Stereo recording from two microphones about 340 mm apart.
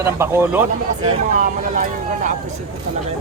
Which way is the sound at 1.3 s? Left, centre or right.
Right.